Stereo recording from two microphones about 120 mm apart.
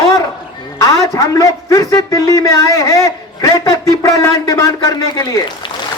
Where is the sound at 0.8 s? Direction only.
30° left (ahead or behind).